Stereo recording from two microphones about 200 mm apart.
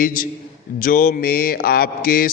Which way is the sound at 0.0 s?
45° left (ahead or behind).